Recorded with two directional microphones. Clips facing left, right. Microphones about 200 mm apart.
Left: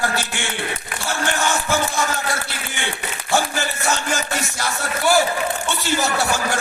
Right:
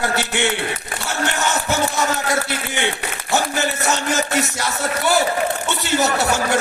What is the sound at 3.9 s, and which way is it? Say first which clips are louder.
Speech: right 1 dB; 20° right (ahead or behind).